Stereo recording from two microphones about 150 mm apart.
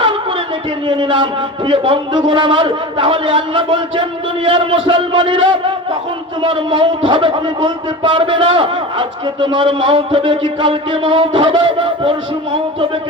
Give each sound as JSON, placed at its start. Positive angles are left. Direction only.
{"t": 0.9, "sound": "speech", "side_deg": -35}